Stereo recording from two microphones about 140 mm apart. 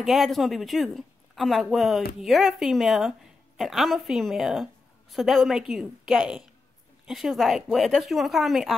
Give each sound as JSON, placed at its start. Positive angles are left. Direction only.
{"t": 0.0, "sound": "a woman's voice", "side_deg": 0}